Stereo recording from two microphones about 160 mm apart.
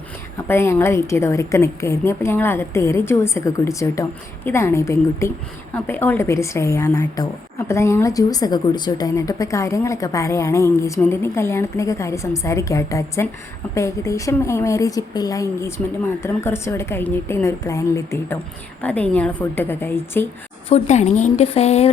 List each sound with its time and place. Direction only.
0.3 s a woman's voice: 15° left (ahead or behind)
20.7 s speech: 45° left (ahead or behind)